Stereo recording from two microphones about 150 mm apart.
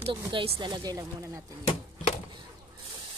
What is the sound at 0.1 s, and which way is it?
Speech, 35° right (ahead or behind).